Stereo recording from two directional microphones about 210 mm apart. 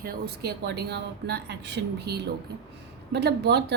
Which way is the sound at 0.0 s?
50° right (ahead or behind).